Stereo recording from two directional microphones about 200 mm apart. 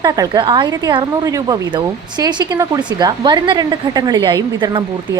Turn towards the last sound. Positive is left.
turn(degrees=-20)  # may be behind; listen again after turning